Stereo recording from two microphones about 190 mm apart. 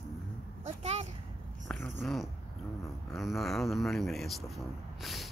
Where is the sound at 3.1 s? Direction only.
Centre (ahead or behind).